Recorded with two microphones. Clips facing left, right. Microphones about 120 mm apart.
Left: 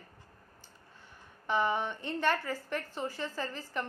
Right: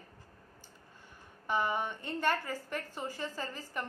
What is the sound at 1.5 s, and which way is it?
A woman's voice, 10° right (ahead or behind).